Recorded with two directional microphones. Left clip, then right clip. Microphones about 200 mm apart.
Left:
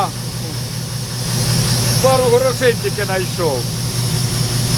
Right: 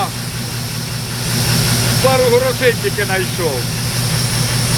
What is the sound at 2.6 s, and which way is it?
Speech, 10° left (ahead or behind).